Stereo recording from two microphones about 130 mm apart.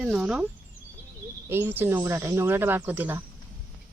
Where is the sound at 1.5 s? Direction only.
15° right (ahead or behind).